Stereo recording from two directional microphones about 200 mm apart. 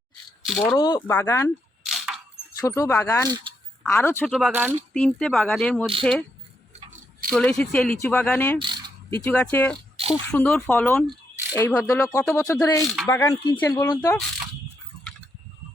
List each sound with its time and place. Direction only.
0.4 s speech: centre (ahead or behind)
0.8 s speech: 20° left (ahead or behind)
1.0 s speech: 10° left (ahead or behind)
1.8 s a sound: centre (ahead or behind)
2.6 s speech: 15° left (ahead or behind)
4.3 s speech: centre (ahead or behind)
4.9 s speech: 5° left (ahead or behind)
7.3 s speech: 5° left (ahead or behind)
8.5 s mechanisms: 25° right (ahead or behind)
9.1 s speech: 10° left (ahead or behind)
10.0 s insect: 30° right (ahead or behind)
10.3 s speech: 5° left (ahead or behind)
13.3 s speech: 20° left (ahead or behind)